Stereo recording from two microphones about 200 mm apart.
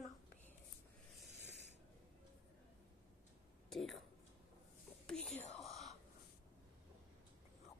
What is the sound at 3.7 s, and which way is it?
Speech, centre (ahead or behind).